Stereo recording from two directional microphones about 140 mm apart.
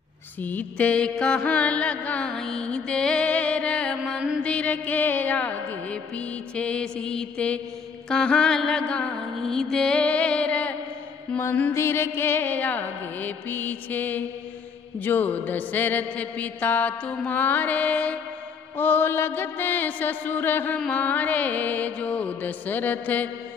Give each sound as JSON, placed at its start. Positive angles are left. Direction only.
{"t": 0.4, "sound": "mantra", "side_deg": 10}